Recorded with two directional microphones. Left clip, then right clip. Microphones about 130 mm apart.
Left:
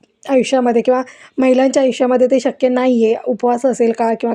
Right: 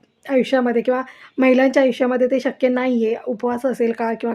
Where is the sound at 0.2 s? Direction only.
40° left (ahead or behind).